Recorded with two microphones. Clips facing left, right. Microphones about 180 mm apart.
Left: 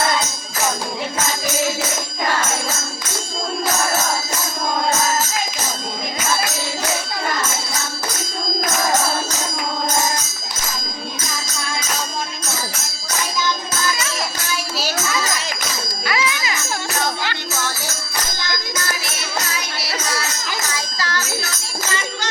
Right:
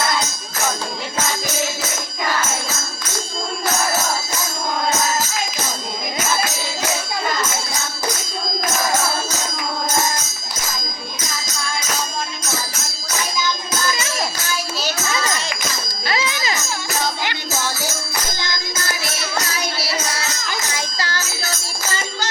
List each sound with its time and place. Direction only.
16.0 s jingle bell: 30° right (ahead or behind)
20.7 s jingle bell: 25° right (ahead or behind)